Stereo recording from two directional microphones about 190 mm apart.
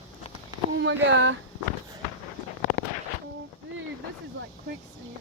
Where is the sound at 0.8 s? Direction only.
70° right (ahead or behind).